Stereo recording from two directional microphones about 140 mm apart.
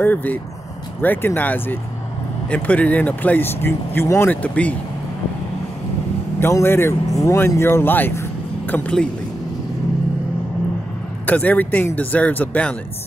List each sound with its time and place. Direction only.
0.0 s speech: 10° left (ahead or behind)
6.4 s speech: 15° left (ahead or behind)
11.2 s speech: 10° left (ahead or behind)